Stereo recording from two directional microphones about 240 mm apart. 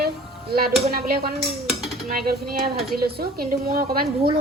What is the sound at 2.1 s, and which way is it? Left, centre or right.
A woman's voice, right.